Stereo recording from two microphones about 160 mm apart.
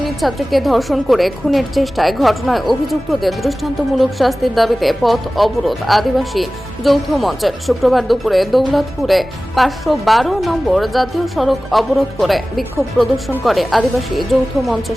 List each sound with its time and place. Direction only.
0.2 s a woman's voice: centre (ahead or behind)